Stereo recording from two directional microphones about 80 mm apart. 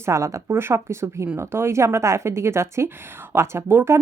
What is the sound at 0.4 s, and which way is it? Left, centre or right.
A woman's voice, right.